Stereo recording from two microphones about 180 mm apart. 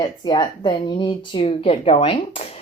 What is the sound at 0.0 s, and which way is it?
A woman's voice, 25° left (ahead or behind).